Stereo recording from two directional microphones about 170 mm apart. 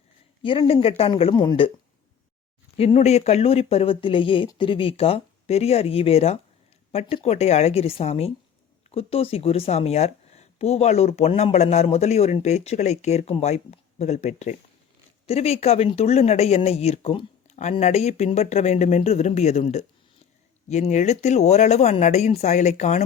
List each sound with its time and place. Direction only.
0.4 s speech: 35° left (ahead or behind)
2.7 s speech: 35° left (ahead or behind)